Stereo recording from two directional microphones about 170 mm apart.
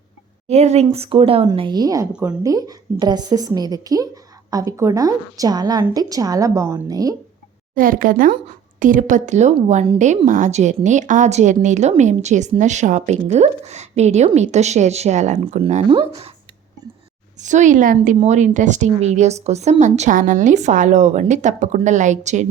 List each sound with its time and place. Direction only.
0.4 s speech: 40° right (ahead or behind); by 2.0 s 20° right (ahead or behind)
2.1 s a woman's voice: 5° right (ahead or behind)
2.4 s a woman's voice: 20° right (ahead or behind)
7.8 s a woman's voice: 55° right (ahead or behind); by 16.3 s 30° right (ahead or behind)
17.3 s a woman's voice: 45° right (ahead or behind)